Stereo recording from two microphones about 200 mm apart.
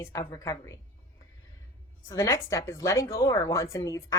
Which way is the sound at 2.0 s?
15° left (ahead or behind).